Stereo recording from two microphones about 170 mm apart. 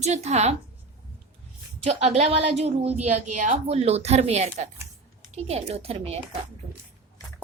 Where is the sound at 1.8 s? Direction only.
40° right (ahead or behind).